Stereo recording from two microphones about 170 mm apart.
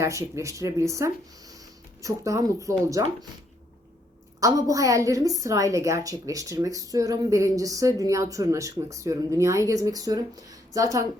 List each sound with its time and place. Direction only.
0.0 s a woman's voice: 15° right (ahead or behind)
4.4 s a woman's voice: 20° right (ahead or behind)